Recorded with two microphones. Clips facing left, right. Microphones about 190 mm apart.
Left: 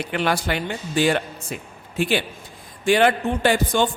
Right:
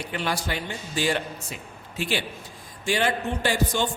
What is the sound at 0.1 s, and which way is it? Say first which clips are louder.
A man's voice: left 6 dB; 70° left (ahead or behind).